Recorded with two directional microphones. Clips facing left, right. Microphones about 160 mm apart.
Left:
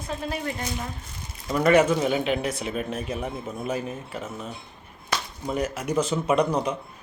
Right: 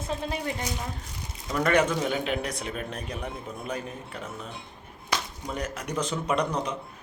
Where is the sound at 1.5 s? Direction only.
5° left (ahead or behind).